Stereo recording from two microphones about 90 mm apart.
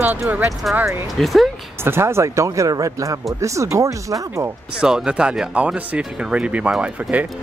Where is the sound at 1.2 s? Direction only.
Centre (ahead or behind).